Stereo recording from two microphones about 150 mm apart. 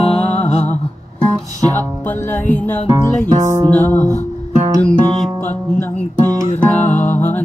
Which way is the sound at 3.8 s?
15° left (ahead or behind).